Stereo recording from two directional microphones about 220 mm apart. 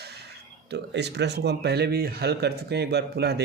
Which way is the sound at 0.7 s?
50° right (ahead or behind).